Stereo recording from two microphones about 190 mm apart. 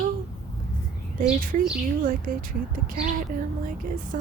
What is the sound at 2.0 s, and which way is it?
Speech, 45° right (ahead or behind).